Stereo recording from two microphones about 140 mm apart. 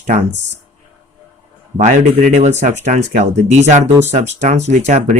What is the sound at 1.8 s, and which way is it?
Speech, 60° right (ahead or behind).